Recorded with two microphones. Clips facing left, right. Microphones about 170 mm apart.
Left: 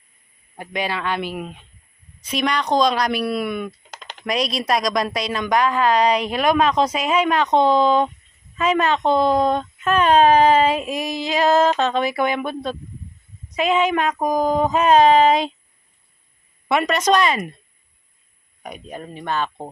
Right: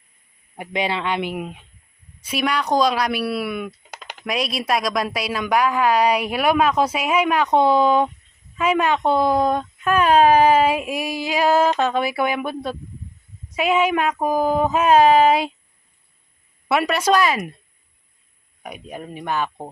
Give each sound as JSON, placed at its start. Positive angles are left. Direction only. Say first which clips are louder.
{"t": 0.5, "sound": "a woman's voice", "louder": "right 2 dB", "side_deg": -20}
{"t": 16.6, "sound": "a woman's voice", "louder": "even", "side_deg": -5}
{"t": 18.6, "sound": "a woman's voice", "louder": "even", "side_deg": -10}